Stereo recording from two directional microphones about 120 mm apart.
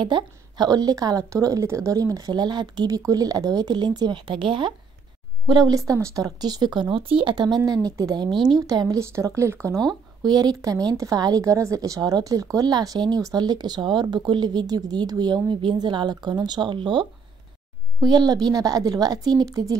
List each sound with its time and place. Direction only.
0.0 s speech: 40° right (ahead or behind); by 9.8 s 20° right (ahead or behind)
10.2 s speech: 35° right (ahead or behind)